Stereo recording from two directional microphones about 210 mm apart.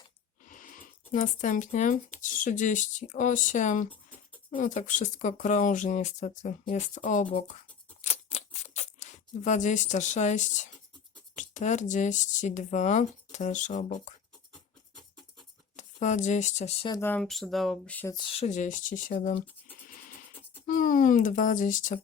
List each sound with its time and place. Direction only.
0.4 s a sound: 40° left (ahead or behind)
1.1 s speech: 35° left (ahead or behind)
8.0 s a sound: 30° left (ahead or behind)
11.3 s speech: 35° left (ahead or behind)
15.7 s speech: 35° left (ahead or behind)
16.9 s speech: 10° left (ahead or behind)
18.1 s speech: 25° left (ahead or behind)
20.7 s speech: 40° left (ahead or behind)